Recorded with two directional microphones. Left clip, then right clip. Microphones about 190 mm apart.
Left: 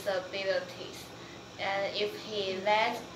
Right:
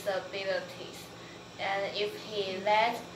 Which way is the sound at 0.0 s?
20° left (ahead or behind).